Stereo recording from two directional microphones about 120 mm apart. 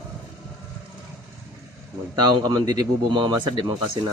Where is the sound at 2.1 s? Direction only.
30° right (ahead or behind).